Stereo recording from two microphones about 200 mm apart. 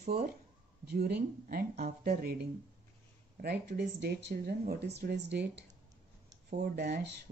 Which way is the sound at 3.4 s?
55° right (ahead or behind).